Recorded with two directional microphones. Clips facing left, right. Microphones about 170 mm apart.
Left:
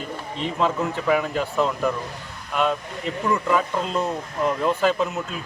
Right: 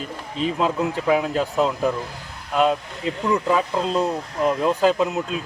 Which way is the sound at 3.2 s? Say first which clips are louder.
Right 2 dB; 20° right (ahead or behind).